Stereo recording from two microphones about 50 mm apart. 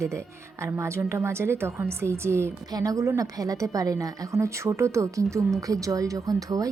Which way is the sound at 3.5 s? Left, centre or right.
Right.